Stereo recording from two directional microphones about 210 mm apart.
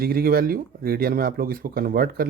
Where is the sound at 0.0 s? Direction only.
45° right (ahead or behind).